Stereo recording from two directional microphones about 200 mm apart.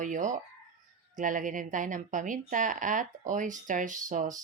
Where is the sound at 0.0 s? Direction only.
40° right (ahead or behind).